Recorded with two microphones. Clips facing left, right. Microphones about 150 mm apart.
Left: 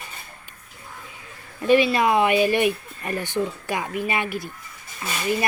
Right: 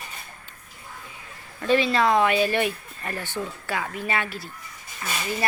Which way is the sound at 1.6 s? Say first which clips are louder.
Left 3 dB; 15° left (ahead or behind).